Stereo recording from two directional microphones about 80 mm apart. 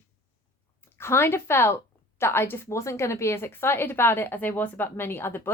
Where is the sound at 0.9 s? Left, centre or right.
Left.